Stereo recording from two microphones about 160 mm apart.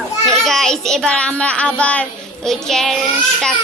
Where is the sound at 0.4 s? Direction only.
Centre (ahead or behind).